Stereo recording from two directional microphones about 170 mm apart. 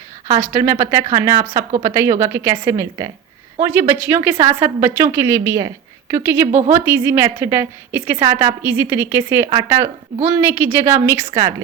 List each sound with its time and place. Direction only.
0.3 s a woman's voice: 15° right (ahead or behind)